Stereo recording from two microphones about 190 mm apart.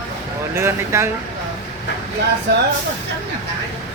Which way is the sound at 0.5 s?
15° right (ahead or behind).